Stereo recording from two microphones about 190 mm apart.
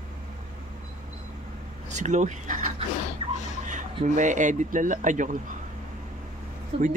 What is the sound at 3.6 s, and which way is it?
Speech, 40° right (ahead or behind).